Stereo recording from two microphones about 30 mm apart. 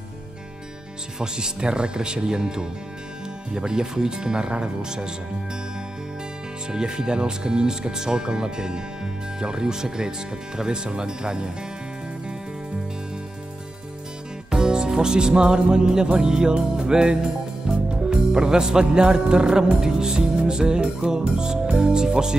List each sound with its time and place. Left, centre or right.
1.2 s speech: right
6.7 s speech: right
14.5 s music: right
16.2 s speech: right
16.5 s music: right
21.7 s speech: right